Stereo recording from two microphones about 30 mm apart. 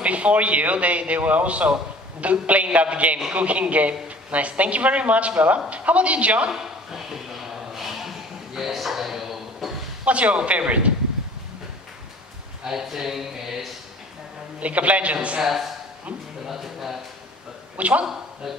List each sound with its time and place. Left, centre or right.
0.0 s a man's voice: right
6.5 s a sound: centre
10.0 s a man's voice: right
12.6 s speech: centre
14.6 s a man's voice: right
15.4 s speech: centre
16.4 s a sound: centre
17.7 s speech: right